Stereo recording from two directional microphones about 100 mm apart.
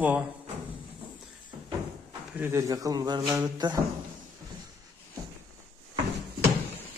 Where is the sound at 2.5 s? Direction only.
35° right (ahead or behind).